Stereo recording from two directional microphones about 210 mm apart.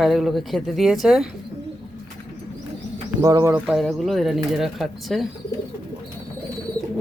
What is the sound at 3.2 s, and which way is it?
Speech, 15° right (ahead or behind).